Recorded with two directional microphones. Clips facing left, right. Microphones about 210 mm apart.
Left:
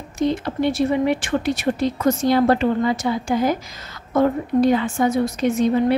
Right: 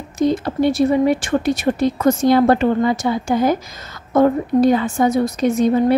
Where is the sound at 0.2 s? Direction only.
40° right (ahead or behind).